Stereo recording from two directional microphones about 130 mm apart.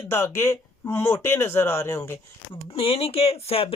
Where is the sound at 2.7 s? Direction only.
45° left (ahead or behind).